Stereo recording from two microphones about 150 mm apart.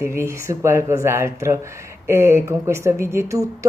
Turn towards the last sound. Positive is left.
turn(degrees=-20)  # may be behind; listen again after turning